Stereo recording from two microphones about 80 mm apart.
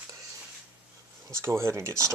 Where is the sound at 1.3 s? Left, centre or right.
Right.